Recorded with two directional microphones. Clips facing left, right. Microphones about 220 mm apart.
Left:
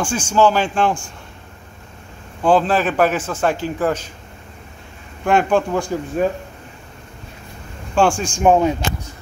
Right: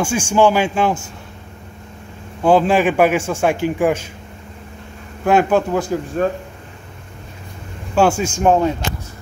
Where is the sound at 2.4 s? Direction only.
10° right (ahead or behind).